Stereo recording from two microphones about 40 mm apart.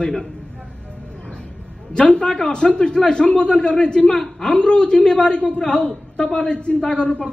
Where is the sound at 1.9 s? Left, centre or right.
Left.